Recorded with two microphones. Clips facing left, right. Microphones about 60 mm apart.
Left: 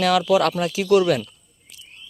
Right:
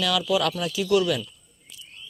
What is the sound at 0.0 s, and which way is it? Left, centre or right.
Speech, left.